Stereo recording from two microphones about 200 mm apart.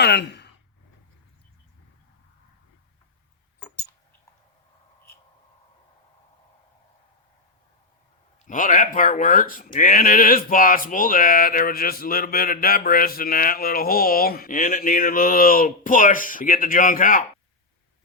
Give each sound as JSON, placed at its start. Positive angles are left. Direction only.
{"t": 0.0, "sound": "speech", "side_deg": 55}
{"t": 8.4, "sound": "speech", "side_deg": 40}